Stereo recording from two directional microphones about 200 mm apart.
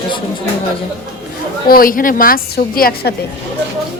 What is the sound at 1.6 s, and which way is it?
A woman's voice, 45° left (ahead or behind).